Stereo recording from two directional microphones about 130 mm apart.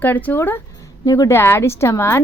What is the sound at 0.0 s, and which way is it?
Speech, 15° left (ahead or behind).